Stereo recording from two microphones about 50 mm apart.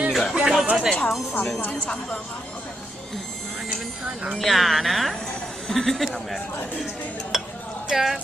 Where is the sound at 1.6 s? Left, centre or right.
Left.